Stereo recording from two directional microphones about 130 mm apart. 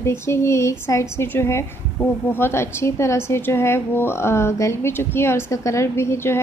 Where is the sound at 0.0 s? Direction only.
20° left (ahead or behind).